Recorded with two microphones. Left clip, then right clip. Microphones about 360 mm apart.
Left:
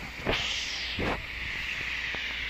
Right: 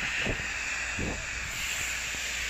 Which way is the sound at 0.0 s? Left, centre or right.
Right.